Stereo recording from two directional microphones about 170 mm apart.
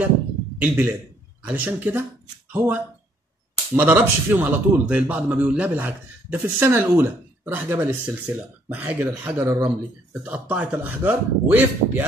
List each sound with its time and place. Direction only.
0.6 s speech: 10° right (ahead or behind)